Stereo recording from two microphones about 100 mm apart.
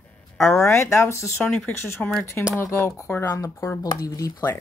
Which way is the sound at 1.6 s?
10° left (ahead or behind).